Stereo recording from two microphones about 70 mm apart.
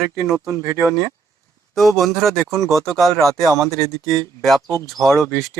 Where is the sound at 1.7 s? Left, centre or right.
Centre.